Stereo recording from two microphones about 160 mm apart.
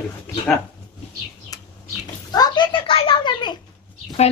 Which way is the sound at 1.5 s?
20° left (ahead or behind).